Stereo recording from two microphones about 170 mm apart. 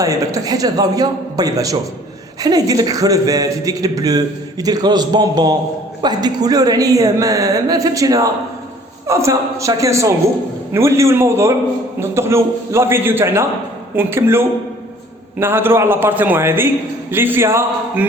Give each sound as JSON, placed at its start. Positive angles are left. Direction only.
{"t": 0.0, "sound": "a man's voice", "side_deg": -20}